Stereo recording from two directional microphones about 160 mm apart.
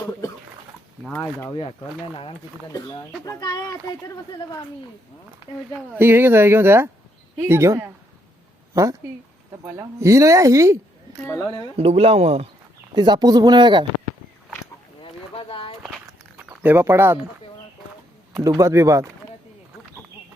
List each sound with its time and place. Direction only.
1.2 s speech: 15° left (ahead or behind)
3.2 s speech: 25° left (ahead or behind)
5.7 s speech: 10° right (ahead or behind)
11.3 s speech: 15° left (ahead or behind)
11.8 s speech: 40° right (ahead or behind)
12.9 s speech: 25° right (ahead or behind)
15.0 s boat: 35° left (ahead or behind)
15.8 s a sound: 5° right (ahead or behind)
18.4 s speech: 20° right (ahead or behind)